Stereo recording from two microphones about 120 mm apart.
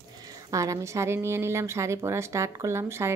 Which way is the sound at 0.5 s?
25° right (ahead or behind).